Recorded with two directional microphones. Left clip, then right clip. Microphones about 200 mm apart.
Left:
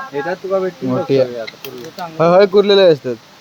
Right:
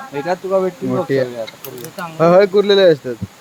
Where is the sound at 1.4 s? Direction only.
50° right (ahead or behind).